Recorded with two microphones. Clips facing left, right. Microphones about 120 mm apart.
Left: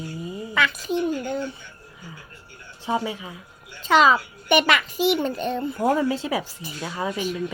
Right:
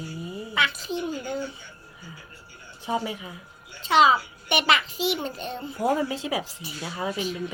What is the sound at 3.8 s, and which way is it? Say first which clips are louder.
A child's voice: left 2 dB; 50° left (ahead or behind).